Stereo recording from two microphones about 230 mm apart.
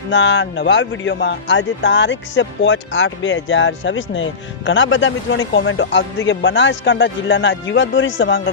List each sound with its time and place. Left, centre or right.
0.1 s a man's voice: left